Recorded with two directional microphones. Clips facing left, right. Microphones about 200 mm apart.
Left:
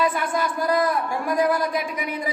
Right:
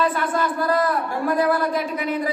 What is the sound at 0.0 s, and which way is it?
A man's voice, 10° left (ahead or behind).